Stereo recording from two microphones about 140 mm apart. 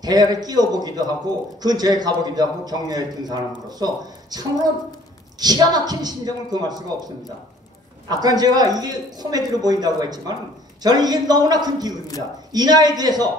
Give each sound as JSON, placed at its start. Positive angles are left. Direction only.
{"t": 0.0, "sound": "a man's voice", "side_deg": -30}
{"t": 8.1, "sound": "a man's voice", "side_deg": -30}